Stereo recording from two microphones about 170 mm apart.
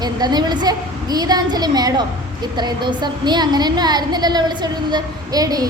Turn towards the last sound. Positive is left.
turn(degrees=-20)  # may be behind; listen again after turning